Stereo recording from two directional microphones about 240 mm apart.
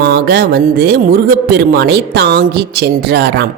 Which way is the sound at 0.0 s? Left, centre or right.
Right.